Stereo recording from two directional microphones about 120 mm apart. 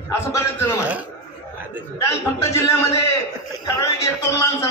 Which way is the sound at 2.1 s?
25° left (ahead or behind).